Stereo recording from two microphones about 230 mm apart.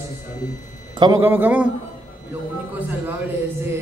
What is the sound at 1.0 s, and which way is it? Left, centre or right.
Speech, centre.